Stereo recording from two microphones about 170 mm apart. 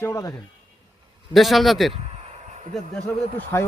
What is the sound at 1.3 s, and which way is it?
Speech, centre (ahead or behind).